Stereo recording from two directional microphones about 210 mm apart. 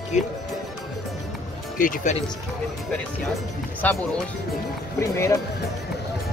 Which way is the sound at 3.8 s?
10° left (ahead or behind).